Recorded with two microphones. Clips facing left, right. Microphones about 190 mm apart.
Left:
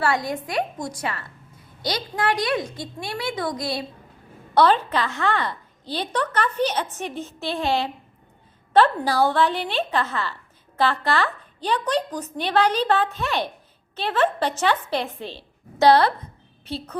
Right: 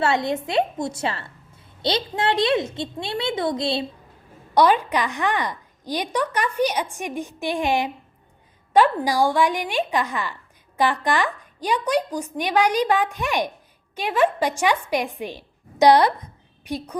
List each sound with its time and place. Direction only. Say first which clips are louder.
0.0 s a woman's voice: right 2 dB; 25° right (ahead or behind)
4.5 s a woman's voice: right 1 dB; 10° right (ahead or behind)